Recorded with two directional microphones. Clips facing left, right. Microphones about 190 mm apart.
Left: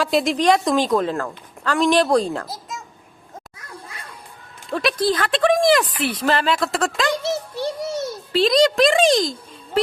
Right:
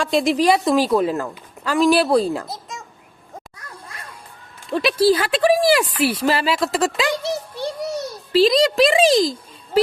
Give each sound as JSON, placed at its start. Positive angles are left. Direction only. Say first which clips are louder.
{"t": 0.0, "sound": "a woman's voice", "louder": "right 1 dB", "side_deg": 0}
{"t": 4.7, "sound": "a woman's voice", "louder": "right 4 dB", "side_deg": 0}
{"t": 7.9, "sound": "a sound", "louder": "left 1 dB", "side_deg": 25}
{"t": 8.3, "sound": "a woman's voice", "louder": "right 1 dB", "side_deg": 0}